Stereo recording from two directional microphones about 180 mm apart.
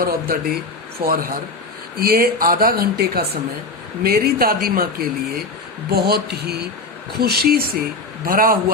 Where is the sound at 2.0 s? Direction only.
55° right (ahead or behind).